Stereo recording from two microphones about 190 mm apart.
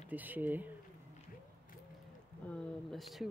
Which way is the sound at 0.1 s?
10° right (ahead or behind).